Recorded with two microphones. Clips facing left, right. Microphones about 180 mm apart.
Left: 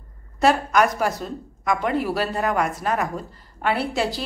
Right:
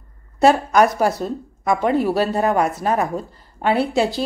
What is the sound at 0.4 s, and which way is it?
A woman's voice, 30° right (ahead or behind).